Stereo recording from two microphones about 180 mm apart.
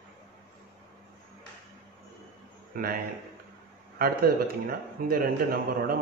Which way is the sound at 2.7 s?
50° right (ahead or behind).